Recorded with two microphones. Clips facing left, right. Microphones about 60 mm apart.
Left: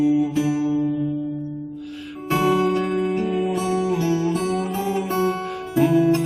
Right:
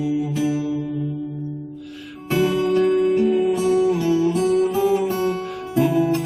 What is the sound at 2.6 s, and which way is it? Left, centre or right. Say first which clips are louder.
Music: right 3 dB; left.